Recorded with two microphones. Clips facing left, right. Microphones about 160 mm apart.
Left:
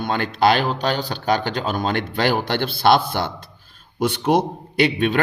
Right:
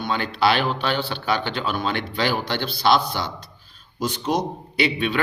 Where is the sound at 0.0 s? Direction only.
50° left (ahead or behind).